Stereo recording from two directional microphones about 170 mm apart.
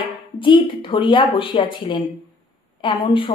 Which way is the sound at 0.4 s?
30° left (ahead or behind).